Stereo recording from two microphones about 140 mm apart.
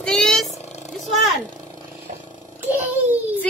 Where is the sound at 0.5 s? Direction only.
50° left (ahead or behind).